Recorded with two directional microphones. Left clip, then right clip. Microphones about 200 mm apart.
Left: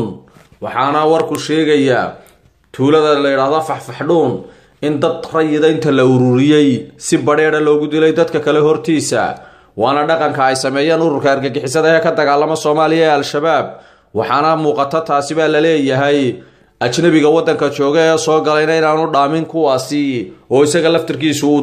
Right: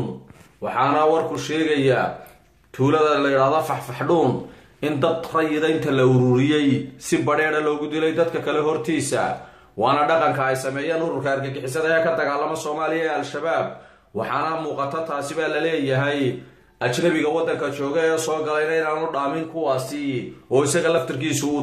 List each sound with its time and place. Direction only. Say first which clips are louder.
0.7 s a man's voice: left 6 dB; 35° left (ahead or behind)
10.3 s speech: left 9 dB; 45° left (ahead or behind)
20.5 s a man's voice: left 8 dB; 25° left (ahead or behind)